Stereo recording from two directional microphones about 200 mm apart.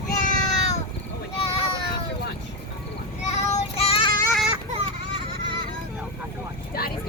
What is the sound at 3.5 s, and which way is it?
Child singing, 30° left (ahead or behind).